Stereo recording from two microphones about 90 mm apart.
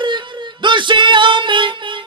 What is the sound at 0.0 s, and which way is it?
Music, 60° right (ahead or behind).